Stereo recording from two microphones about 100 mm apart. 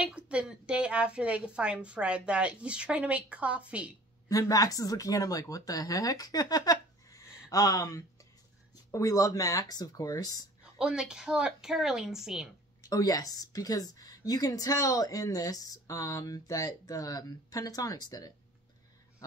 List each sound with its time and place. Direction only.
0.0 s a woman's voice: 10° right (ahead or behind)
4.3 s a woman's voice: 35° left (ahead or behind)
10.6 s a woman's voice: 10° right (ahead or behind)
12.8 s a woman's voice: 35° left (ahead or behind)